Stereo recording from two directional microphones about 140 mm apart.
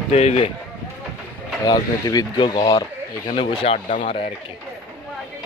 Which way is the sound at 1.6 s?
30° left (ahead or behind).